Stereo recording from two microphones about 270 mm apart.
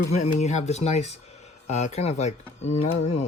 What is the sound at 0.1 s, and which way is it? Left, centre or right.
Speech, left.